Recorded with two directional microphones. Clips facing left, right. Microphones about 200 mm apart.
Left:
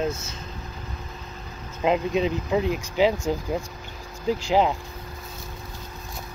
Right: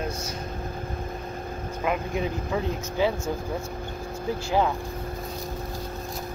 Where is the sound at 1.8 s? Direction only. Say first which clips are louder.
Left 5 dB; 20° left (ahead or behind).